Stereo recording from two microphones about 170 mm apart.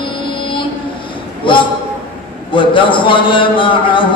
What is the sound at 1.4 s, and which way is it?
Speech, 30° left (ahead or behind).